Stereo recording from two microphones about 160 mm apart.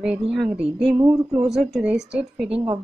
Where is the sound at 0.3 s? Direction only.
5° right (ahead or behind).